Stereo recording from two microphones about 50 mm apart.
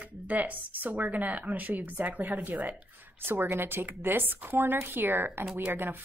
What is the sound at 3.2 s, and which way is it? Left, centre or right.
A woman's voice, right.